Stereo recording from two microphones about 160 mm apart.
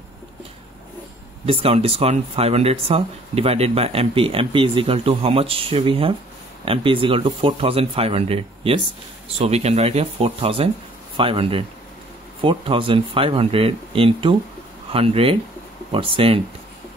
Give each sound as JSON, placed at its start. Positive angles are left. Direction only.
{"t": 1.4, "sound": "speech", "side_deg": -35}